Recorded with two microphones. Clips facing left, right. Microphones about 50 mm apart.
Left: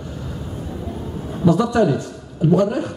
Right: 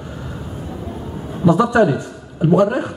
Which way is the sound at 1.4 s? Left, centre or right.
Centre.